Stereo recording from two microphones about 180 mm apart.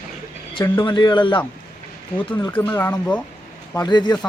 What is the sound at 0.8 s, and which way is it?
Speech, 25° left (ahead or behind).